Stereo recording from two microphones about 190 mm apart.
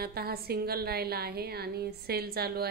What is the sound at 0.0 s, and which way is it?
A woman's voice, 55° right (ahead or behind).